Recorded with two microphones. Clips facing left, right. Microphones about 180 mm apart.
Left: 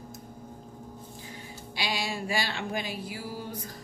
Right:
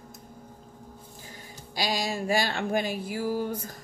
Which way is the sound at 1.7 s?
40° right (ahead or behind).